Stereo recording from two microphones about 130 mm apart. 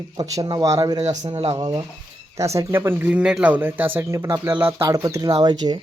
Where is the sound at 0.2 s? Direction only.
30° right (ahead or behind).